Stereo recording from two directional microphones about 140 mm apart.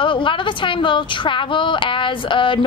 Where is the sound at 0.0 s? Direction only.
35° left (ahead or behind).